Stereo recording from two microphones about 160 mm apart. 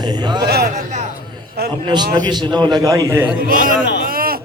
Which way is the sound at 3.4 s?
60° right (ahead or behind).